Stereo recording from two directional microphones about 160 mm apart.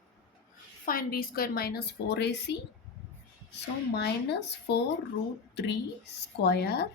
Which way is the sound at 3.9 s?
90° left.